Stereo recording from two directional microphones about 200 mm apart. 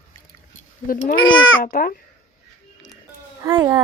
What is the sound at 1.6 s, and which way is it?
Speech, 45° left (ahead or behind).